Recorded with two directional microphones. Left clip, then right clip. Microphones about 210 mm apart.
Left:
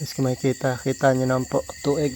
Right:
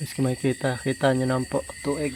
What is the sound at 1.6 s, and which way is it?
Speech, 35° left (ahead or behind).